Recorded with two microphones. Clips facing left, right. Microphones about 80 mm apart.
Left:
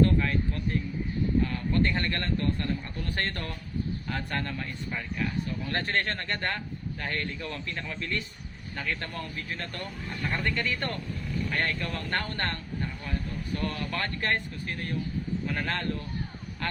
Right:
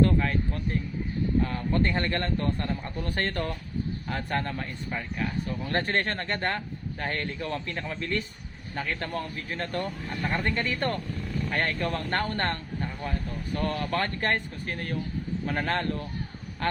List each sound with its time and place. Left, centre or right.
0.0 s a man's voice: right
13.6 s speech: right